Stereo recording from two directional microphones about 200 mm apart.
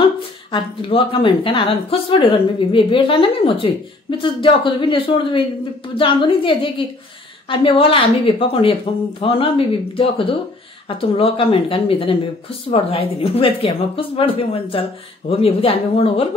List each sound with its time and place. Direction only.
0.0 s a woman's voice: 25° left (ahead or behind)